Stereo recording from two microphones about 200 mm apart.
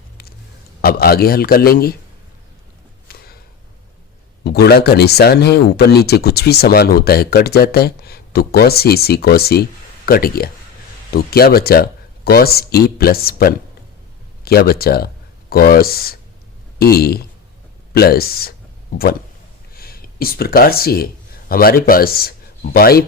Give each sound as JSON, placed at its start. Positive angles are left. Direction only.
{"t": 0.8, "sound": "speech", "side_deg": 50}
{"t": 3.1, "sound": "a sound", "side_deg": 50}
{"t": 4.4, "sound": "speech", "side_deg": 55}
{"t": 19.7, "sound": "speech", "side_deg": 50}